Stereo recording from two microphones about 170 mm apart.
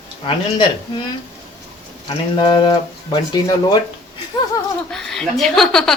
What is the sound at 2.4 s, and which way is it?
Speech, 30° left (ahead or behind).